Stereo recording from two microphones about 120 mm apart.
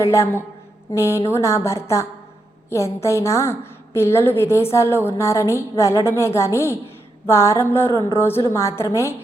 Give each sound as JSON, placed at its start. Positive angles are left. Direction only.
{"t": 0.0, "sound": "a woman's voice", "side_deg": 25}